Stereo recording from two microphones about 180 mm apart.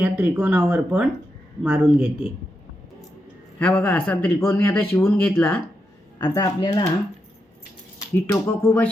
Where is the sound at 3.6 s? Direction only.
10° left (ahead or behind).